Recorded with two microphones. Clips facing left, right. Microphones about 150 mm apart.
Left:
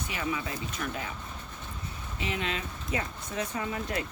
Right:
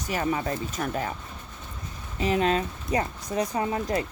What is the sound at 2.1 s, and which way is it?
Speech, 40° right (ahead or behind).